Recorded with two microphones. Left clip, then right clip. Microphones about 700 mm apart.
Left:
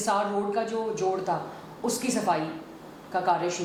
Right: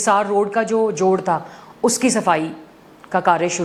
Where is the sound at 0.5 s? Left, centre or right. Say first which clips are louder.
Right 10 dB; right.